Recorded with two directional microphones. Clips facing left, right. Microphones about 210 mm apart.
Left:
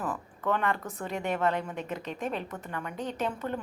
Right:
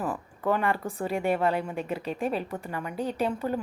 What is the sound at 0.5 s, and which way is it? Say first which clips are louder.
A woman's voice: right 2 dB; 10° right (ahead or behind).